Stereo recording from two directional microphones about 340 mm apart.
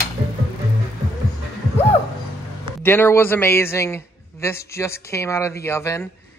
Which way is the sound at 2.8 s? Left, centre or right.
Centre.